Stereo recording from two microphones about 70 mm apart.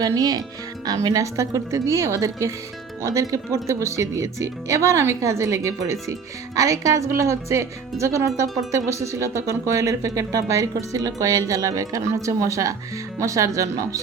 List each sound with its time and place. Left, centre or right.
0.0 s speech: right